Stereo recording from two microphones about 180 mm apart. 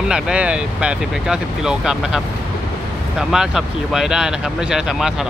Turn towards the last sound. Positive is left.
turn(degrees=0)  # may be behind; listen again after turning